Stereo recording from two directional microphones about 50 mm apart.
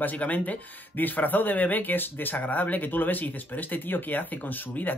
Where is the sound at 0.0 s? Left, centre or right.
Left.